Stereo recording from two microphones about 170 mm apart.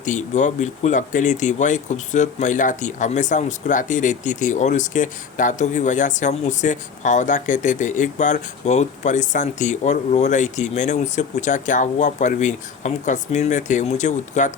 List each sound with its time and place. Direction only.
0.0 s speech: 45° left (ahead or behind)